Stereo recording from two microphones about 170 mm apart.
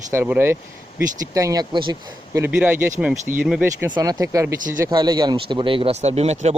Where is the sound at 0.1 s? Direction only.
15° right (ahead or behind).